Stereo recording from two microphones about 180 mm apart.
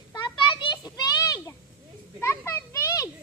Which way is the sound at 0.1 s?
25° left (ahead or behind).